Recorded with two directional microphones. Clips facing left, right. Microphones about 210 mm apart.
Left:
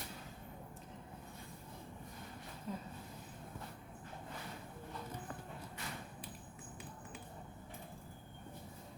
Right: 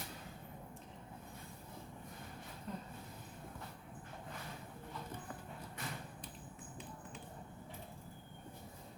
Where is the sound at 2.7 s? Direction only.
5° left (ahead or behind).